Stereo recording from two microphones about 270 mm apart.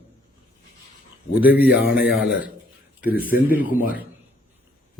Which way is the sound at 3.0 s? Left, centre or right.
Left.